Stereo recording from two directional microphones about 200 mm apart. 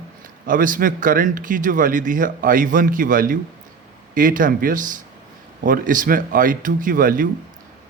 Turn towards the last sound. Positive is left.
turn(degrees=-45)  # may be behind; listen again after turning